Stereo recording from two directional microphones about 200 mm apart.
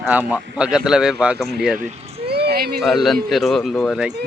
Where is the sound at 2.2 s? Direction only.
55° right (ahead or behind).